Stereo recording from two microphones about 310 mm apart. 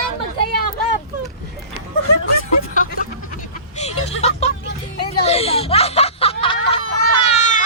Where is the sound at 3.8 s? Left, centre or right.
Left.